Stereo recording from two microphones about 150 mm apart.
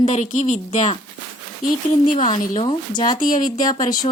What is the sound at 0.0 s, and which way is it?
Speech, 55° left (ahead or behind).